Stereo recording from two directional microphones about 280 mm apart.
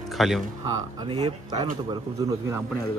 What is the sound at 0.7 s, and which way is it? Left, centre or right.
Speech, centre.